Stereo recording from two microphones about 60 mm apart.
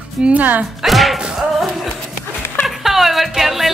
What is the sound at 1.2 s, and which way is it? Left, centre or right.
Music, centre.